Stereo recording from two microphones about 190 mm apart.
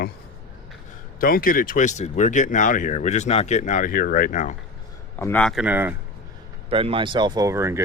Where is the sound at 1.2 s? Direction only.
50° left (ahead or behind).